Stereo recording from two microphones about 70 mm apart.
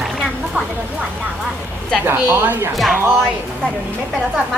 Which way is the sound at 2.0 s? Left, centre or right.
Right.